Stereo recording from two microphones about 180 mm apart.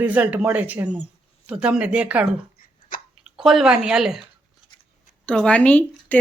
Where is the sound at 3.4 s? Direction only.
Centre (ahead or behind).